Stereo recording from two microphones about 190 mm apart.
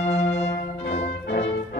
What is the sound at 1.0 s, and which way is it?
Music, 65° left (ahead or behind).